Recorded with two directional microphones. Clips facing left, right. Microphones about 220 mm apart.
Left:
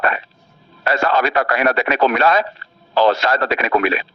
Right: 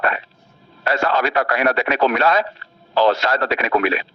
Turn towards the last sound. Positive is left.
turn(degrees=65)  # may be behind; listen again after turning